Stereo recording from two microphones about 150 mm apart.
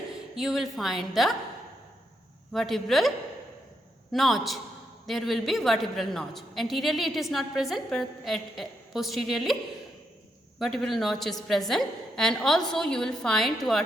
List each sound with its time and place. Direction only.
0.3 s a woman's voice: centre (ahead or behind)
2.5 s a woman's voice: centre (ahead or behind)
4.1 s a woman's voice: centre (ahead or behind)
10.6 s a woman's voice: centre (ahead or behind)